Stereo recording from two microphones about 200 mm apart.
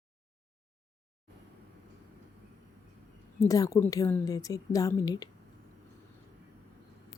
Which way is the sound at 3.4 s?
15° left (ahead or behind).